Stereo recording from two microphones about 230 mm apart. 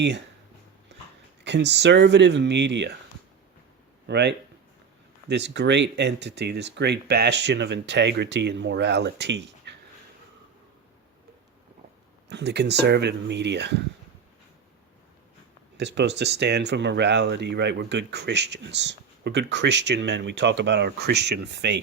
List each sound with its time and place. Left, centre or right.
1.5 s speech: right
4.0 s speech: right
12.3 s speech: right
15.8 s speech: right